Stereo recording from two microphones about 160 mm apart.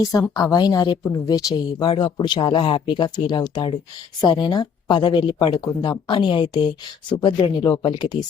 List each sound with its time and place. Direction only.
0.0 s a woman's voice: 20° left (ahead or behind)